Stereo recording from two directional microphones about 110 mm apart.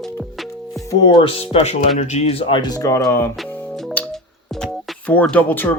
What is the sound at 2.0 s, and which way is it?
Speech, 80° left.